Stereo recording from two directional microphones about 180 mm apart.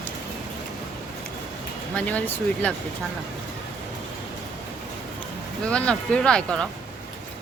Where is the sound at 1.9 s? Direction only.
5° left (ahead or behind).